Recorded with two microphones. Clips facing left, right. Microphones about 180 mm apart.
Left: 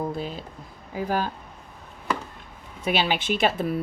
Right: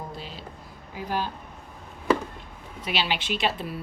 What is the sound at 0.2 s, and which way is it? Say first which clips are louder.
Speech: left 7 dB; 50° left (ahead or behind).